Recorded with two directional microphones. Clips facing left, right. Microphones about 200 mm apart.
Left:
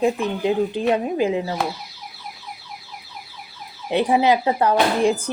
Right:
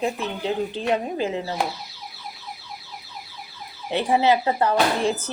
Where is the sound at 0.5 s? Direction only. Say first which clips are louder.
Left 3 dB; 15° left (ahead or behind).